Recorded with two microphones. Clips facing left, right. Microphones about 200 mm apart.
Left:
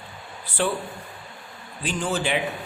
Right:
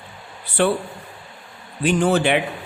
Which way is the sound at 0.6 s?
65° right (ahead or behind).